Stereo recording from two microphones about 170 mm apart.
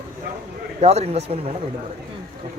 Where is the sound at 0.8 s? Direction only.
40° right (ahead or behind).